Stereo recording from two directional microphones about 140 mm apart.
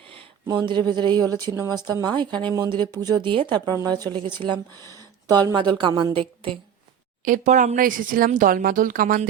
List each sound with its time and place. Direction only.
0.4 s speech: 30° right (ahead or behind)
7.3 s a woman's voice: 70° right (ahead or behind); by 9.2 s 90° right